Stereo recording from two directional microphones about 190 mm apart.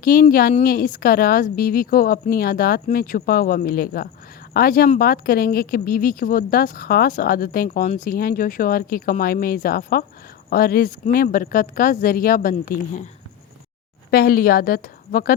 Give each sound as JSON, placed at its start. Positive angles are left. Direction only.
{"t": 0.0, "sound": "speech", "side_deg": 50}
{"t": 14.1, "sound": "speech", "side_deg": 50}